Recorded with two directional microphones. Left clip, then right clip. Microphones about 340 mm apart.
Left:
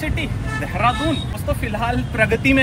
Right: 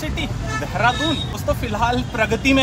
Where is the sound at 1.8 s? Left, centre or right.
Centre.